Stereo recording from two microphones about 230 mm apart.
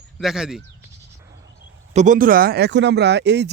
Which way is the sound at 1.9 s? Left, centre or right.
Right.